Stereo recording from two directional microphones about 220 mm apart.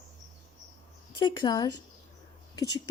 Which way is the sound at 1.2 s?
20° left (ahead or behind).